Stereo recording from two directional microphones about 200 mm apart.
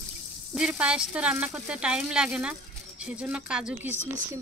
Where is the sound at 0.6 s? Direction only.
5° right (ahead or behind).